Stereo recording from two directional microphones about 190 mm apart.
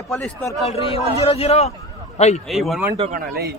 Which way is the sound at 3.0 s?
45° right (ahead or behind).